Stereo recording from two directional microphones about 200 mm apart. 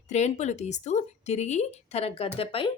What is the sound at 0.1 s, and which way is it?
Speech, 35° left (ahead or behind).